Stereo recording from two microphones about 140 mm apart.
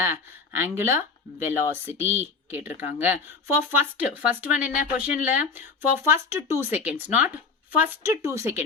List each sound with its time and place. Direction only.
0.0 s speech: 15° right (ahead or behind)